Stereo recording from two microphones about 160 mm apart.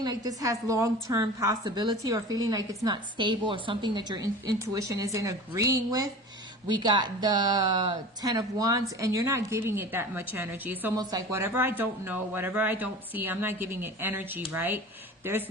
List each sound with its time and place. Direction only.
0.0 s a woman's voice: 25° right (ahead or behind)
10.9 s speech: 25° right (ahead or behind)